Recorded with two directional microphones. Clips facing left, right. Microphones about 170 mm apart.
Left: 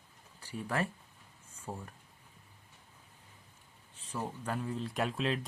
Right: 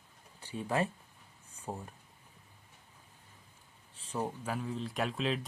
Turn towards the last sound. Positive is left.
turn(degrees=0)  # may be behind; listen again after turning